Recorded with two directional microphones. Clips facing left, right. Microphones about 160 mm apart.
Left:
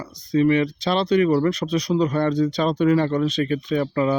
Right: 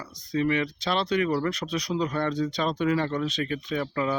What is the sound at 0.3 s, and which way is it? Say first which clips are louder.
Speech: left 7 dB; 30° left (ahead or behind).